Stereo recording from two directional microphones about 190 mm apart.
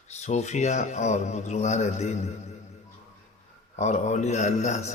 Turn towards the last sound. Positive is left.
turn(degrees=35)  # may be behind; listen again after turning